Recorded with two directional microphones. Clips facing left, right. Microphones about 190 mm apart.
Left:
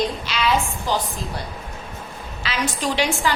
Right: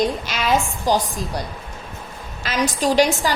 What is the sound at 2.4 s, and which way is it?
Speech, 40° right (ahead or behind).